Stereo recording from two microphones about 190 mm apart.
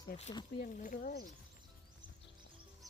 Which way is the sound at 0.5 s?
45° left (ahead or behind).